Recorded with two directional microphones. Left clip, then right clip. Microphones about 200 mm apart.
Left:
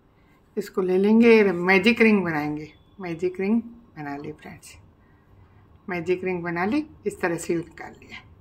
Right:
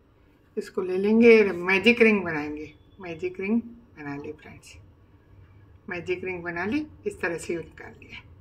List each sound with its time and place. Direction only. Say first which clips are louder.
0.6 s speech: left 5 dB; 35° left (ahead or behind)
5.9 s speech: left 5 dB; 35° left (ahead or behind)